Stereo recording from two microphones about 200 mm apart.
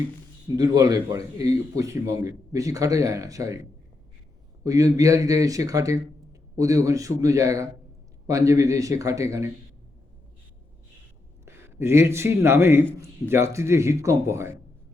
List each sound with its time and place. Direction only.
0.4 s speech: 20° right (ahead or behind)
4.6 s speech: 15° right (ahead or behind)
11.4 s speech: 10° right (ahead or behind)